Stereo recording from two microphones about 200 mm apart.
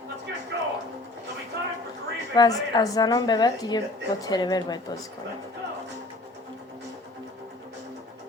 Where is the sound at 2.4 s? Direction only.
20° left (ahead or behind).